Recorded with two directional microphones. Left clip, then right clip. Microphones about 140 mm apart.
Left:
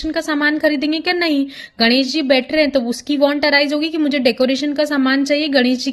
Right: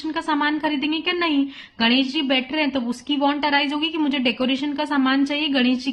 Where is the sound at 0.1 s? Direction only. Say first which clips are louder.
Left 4 dB; 35° left (ahead or behind).